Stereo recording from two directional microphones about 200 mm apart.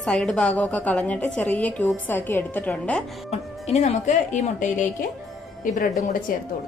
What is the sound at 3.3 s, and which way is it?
A woman's voice, 35° left (ahead or behind).